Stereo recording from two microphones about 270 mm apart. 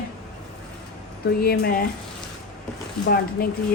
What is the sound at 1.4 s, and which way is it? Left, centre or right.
Speech, left.